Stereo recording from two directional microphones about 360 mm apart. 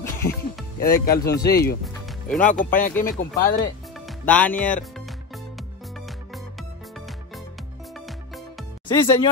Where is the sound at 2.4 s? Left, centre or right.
Left.